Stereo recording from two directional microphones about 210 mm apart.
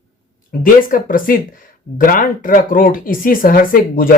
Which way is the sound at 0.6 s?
40° left (ahead or behind).